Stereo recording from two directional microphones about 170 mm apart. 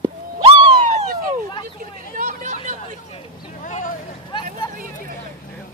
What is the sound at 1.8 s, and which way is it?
Hubbub, 50° right (ahead or behind).